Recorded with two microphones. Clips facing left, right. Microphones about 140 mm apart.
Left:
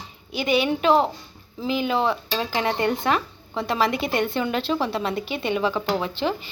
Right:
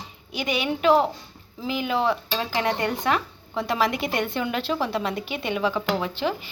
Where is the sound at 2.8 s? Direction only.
10° right (ahead or behind).